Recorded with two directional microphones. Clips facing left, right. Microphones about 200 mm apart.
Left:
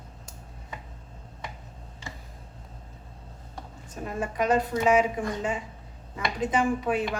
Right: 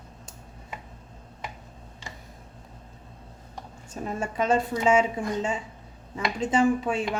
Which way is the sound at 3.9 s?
30° right (ahead or behind).